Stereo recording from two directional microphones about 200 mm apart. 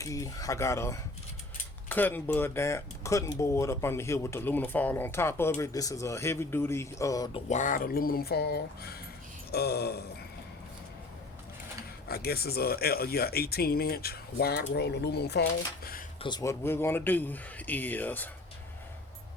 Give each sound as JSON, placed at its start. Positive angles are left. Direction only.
{"t": 0.0, "sound": "speech", "side_deg": 15}
{"t": 7.5, "sound": "speech", "side_deg": 40}
{"t": 12.0, "sound": "speech", "side_deg": 50}
{"t": 16.2, "sound": "speech", "side_deg": 20}